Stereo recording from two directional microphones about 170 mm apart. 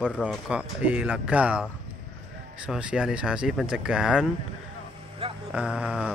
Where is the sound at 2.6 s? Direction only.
5° right (ahead or behind).